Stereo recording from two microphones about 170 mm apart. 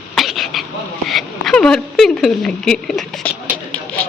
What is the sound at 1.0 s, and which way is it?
Speech, centre (ahead or behind).